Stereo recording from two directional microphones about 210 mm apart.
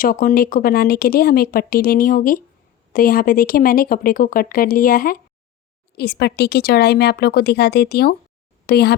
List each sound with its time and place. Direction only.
0.0 s speech: 40° left (ahead or behind)